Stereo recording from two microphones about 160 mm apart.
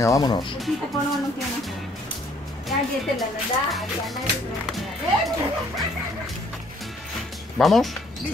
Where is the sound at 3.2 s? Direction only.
Centre (ahead or behind).